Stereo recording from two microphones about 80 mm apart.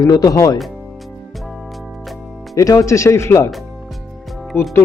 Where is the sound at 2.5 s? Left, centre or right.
Left.